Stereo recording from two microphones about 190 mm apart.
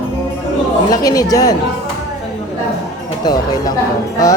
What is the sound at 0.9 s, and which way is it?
Speech, 20° left (ahead or behind).